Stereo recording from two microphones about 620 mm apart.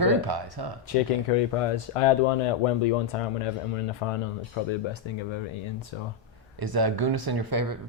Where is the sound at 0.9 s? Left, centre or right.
Left.